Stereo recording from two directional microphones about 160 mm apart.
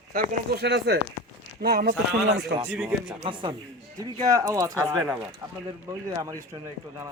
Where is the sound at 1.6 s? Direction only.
75° right (ahead or behind).